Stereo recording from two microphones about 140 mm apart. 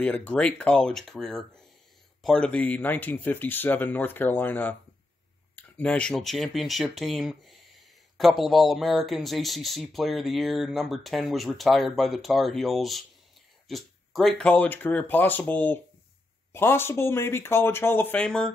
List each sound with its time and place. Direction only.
0.0 s speech: 10° left (ahead or behind)